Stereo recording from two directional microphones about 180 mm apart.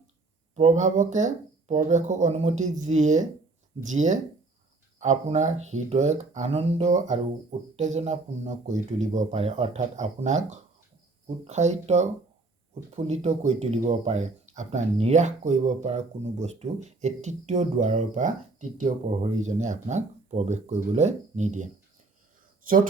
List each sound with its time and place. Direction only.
0.5 s speech: 40° right (ahead or behind)
13.1 s speech: 35° right (ahead or behind)